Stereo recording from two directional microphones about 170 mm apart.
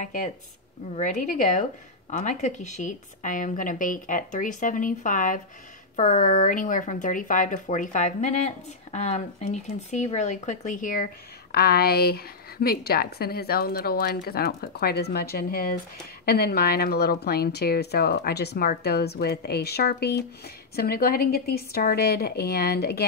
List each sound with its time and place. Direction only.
0.0 s speech: 45° left (ahead or behind)
11.5 s a woman's voice: 65° left (ahead or behind)